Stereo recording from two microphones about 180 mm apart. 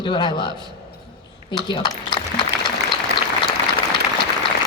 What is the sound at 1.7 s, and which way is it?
Speech, 25° left (ahead or behind).